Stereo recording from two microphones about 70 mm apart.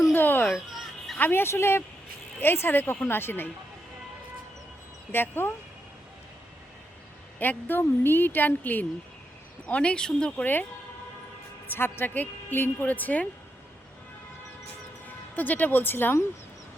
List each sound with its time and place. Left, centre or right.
0.1 s a sound: left
0.4 s fowl: centre
1.2 s speech: left
5.1 s speech: left
7.3 s speech: left; by 10.4 s centre
10.4 s speech: left
11.7 s speech: left
15.0 s speech: left